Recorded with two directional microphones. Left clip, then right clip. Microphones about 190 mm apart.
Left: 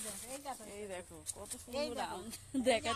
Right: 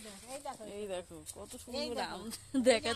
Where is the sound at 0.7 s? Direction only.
45° right (ahead or behind).